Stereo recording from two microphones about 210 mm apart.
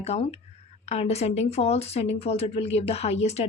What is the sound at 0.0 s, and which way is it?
A woman's voice, 30° left (ahead or behind).